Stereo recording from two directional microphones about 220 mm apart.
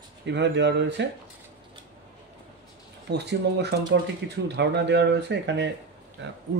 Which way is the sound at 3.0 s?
50° right (ahead or behind).